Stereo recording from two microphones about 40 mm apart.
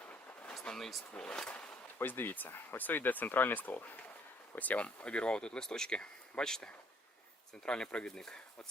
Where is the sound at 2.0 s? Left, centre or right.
Left.